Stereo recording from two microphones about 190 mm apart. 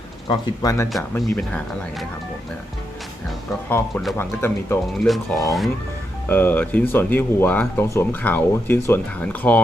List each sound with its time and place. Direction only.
0.3 s speech: 20° left (ahead or behind)
1.2 s speech: centre (ahead or behind)
3.7 s speech: 10° left (ahead or behind)
4.9 s speech: centre (ahead or behind)
6.2 s speech: 10° left (ahead or behind)